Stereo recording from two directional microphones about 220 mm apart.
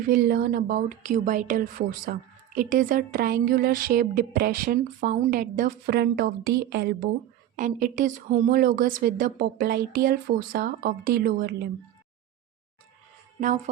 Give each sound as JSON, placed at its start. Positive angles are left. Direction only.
{"t": 0.0, "sound": "speech", "side_deg": -45}
{"t": 7.5, "sound": "speech", "side_deg": -35}